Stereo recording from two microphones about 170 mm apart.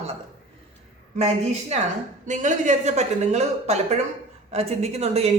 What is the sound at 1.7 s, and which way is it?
Speech, 40° right (ahead or behind).